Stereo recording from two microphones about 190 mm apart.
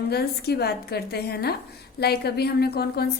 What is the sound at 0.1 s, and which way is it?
A woman's voice, 55° left (ahead or behind).